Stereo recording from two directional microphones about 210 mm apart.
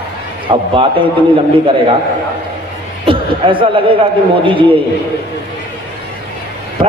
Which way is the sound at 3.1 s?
25° right (ahead or behind).